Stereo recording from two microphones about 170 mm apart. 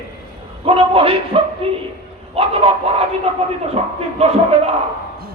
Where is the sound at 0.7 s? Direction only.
35° right (ahead or behind).